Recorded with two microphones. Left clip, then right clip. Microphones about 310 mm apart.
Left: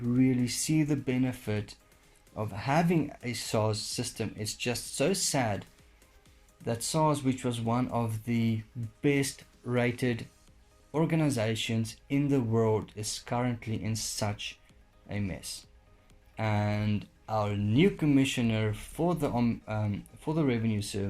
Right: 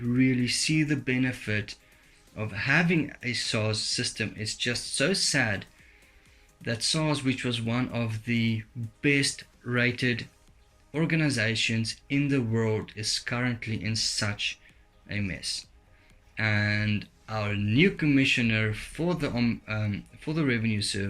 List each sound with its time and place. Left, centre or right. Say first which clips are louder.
0.1 s a sound: right 3 dB; centre
0.8 s speech: right 3 dB; left
6.7 s speech: even; left